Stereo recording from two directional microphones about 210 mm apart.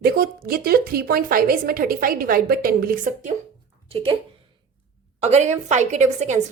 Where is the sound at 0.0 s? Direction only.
45° right (ahead or behind).